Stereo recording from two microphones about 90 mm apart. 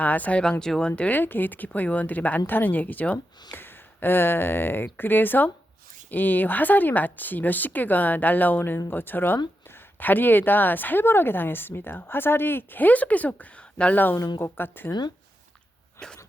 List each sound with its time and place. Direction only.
0.0 s a woman's voice: 15° left (ahead or behind)